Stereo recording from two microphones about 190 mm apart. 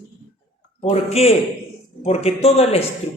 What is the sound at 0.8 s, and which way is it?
Speech, 35° left (ahead or behind).